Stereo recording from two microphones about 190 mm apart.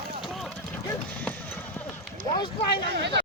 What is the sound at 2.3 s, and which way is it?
Speech, 25° left (ahead or behind).